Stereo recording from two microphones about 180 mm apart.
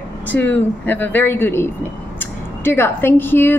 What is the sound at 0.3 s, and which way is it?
A woman's voice, 10° left (ahead or behind).